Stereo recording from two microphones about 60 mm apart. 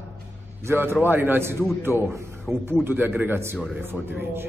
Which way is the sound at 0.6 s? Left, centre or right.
Right.